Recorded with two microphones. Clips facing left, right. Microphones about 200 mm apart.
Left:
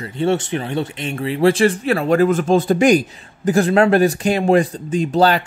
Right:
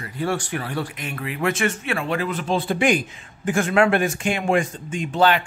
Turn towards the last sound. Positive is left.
turn(degrees=40)  # may be behind; listen again after turning